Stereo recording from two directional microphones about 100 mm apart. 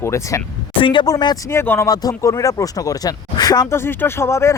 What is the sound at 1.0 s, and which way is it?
Speech, 45° left (ahead or behind).